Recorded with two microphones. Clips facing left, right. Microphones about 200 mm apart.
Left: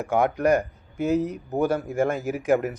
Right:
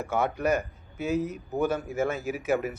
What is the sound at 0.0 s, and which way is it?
A man's voice, 15° left (ahead or behind).